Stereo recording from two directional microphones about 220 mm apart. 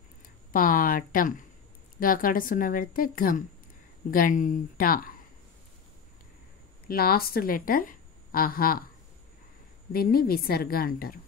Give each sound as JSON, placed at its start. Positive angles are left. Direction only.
{"t": 0.5, "sound": "a woman's voice", "side_deg": 40}
{"t": 6.9, "sound": "speech", "side_deg": 40}
{"t": 9.9, "sound": "a woman's voice", "side_deg": 45}